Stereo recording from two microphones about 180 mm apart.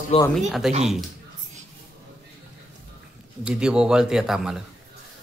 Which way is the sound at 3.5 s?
5° right (ahead or behind).